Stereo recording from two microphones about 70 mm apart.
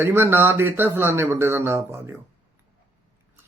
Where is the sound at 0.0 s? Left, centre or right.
Right.